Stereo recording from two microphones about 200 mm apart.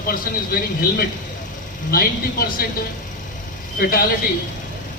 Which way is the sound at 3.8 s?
45° left (ahead or behind).